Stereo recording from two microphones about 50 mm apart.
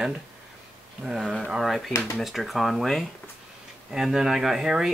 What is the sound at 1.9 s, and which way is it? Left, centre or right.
Speech, left.